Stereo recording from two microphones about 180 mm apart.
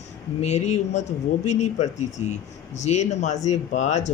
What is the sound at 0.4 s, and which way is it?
Speech, 40° left (ahead or behind).